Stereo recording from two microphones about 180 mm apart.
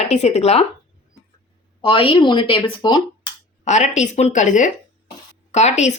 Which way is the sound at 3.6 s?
40° left (ahead or behind).